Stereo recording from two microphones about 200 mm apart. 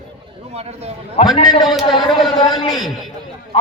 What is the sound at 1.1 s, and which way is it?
A man's voice, 20° left (ahead or behind).